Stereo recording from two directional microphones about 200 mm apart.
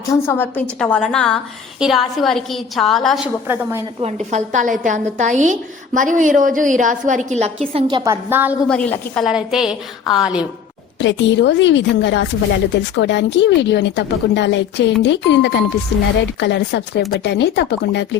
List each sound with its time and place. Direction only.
0.0 s a woman's voice: 15° left (ahead or behind)
3.4 s a woman's voice: 10° right (ahead or behind)
4.0 s a woman's voice: 35° right (ahead or behind); by 8.5 s 10° right (ahead or behind)
8.7 s a woman's voice: 5° left (ahead or behind)
11.0 s a woman's voice: 65° left (ahead or behind)